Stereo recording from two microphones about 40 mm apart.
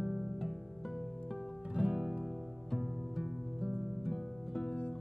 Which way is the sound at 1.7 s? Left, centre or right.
Centre.